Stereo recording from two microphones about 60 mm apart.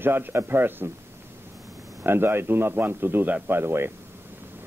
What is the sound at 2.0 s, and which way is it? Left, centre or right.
A man's voice, right.